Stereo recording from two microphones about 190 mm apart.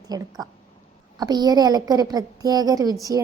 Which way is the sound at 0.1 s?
20° right (ahead or behind).